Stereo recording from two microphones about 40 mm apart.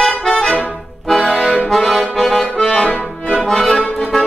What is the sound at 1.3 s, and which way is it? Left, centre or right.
Accordion, left.